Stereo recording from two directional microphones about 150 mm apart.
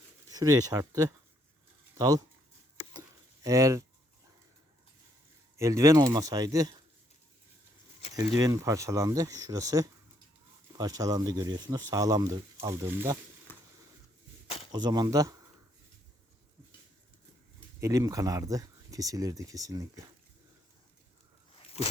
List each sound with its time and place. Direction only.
0.3 s speech: 25° right (ahead or behind)
3.4 s speech: 20° right (ahead or behind)
5.5 s speech: 20° right (ahead or behind)
8.1 s speech: 25° right (ahead or behind)
13.5 s a sound: 15° left (ahead or behind)
14.7 s speech: 30° right (ahead or behind)
17.7 s speech: 20° right (ahead or behind)